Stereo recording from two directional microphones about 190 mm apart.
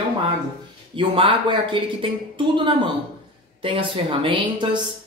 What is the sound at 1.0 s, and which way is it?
Speech, 30° right (ahead or behind).